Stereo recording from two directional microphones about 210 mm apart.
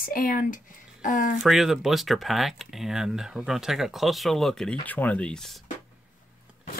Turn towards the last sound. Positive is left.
turn(degrees=0)  # may be behind; listen again after turning